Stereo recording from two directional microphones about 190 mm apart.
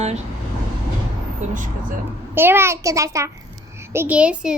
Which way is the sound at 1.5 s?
45° right (ahead or behind).